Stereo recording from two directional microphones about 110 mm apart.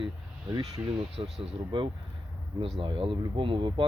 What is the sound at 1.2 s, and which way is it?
Speech, 50° right (ahead or behind).